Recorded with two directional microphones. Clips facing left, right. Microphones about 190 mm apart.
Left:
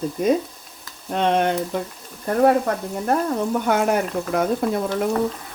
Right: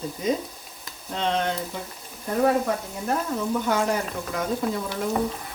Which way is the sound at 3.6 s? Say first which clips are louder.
Left 4 dB; 60° left (ahead or behind).